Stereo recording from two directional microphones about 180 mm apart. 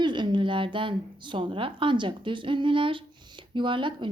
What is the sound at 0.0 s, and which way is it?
A woman's voice, 25° right (ahead or behind).